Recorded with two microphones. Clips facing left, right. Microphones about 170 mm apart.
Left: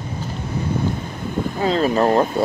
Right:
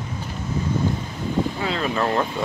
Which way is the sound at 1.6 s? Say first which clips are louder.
Left 6 dB; 40° left (ahead or behind).